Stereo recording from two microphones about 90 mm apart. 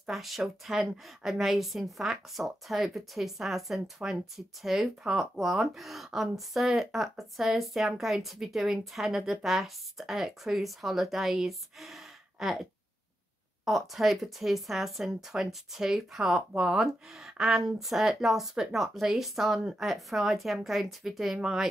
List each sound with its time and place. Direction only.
0.0 s a woman's voice: centre (ahead or behind)
13.7 s a woman's voice: centre (ahead or behind)